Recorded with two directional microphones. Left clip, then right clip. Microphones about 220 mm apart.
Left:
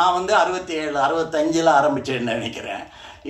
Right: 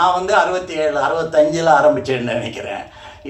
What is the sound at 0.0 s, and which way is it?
Speech, 50° left (ahead or behind).